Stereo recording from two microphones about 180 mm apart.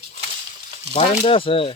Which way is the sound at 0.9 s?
35° left (ahead or behind).